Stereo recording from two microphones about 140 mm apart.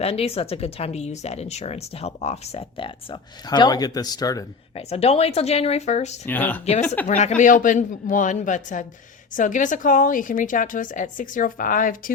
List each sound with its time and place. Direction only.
0.0 s speech: 45° left (ahead or behind); by 4.4 s 25° left (ahead or behind)
4.7 s speech: 50° left (ahead or behind)
6.2 s speech: 15° left (ahead or behind)
7.1 s a man's voice: 60° left (ahead or behind); by 12.1 s 75° left (ahead or behind)